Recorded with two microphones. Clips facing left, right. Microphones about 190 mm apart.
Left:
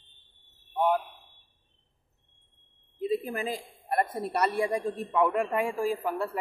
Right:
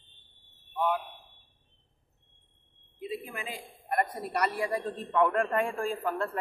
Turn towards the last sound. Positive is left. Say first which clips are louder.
# left 2 dB
turn(degrees=10)  # may be behind; listen again after turning